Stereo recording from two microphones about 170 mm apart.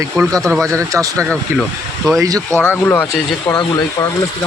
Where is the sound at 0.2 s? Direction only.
20° right (ahead or behind).